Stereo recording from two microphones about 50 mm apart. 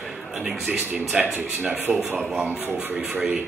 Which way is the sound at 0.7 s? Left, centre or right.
Right.